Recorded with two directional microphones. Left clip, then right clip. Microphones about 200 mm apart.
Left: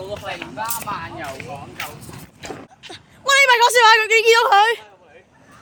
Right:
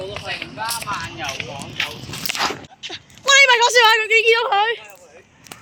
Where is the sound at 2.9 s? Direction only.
Centre (ahead or behind).